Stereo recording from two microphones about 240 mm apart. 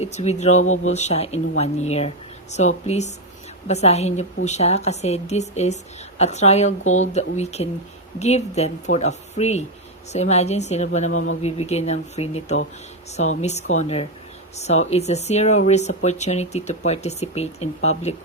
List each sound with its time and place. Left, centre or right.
0.0 s a woman's voice: left